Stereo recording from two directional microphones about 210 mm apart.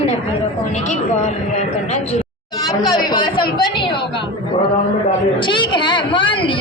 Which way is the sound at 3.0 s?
20° left (ahead or behind).